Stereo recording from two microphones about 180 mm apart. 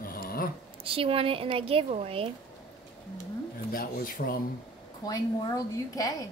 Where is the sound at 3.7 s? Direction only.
55° left (ahead or behind).